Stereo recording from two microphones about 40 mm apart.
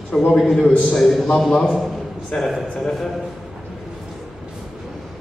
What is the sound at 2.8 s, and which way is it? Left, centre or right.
Speech, centre.